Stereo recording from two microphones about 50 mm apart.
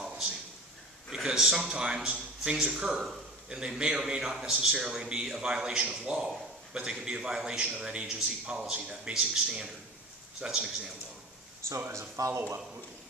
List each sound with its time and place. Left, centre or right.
1.1 s a man's voice: centre
9.1 s a man's voice: centre
11.9 s speech: right